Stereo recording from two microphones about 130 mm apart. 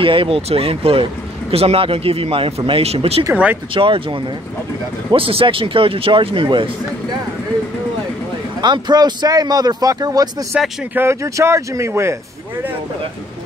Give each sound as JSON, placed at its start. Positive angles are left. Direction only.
{"t": 0.0, "sound": "speech", "side_deg": -45}
{"t": 8.5, "sound": "speech", "side_deg": -35}
{"t": 10.5, "sound": "speech", "side_deg": -5}
{"t": 11.0, "sound": "speech", "side_deg": -20}